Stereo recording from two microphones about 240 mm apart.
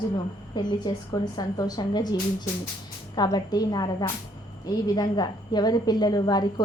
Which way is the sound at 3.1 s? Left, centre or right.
Centre.